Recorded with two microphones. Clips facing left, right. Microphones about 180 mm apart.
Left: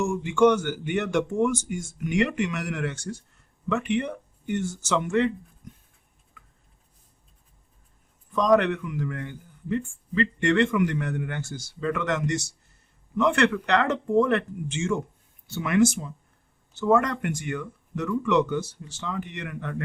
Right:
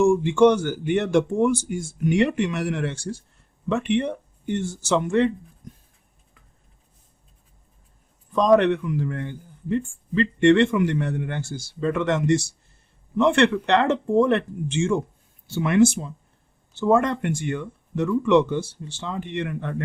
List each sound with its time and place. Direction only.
0.0 s a man's voice: 30° right (ahead or behind)
8.3 s a man's voice: 30° right (ahead or behind)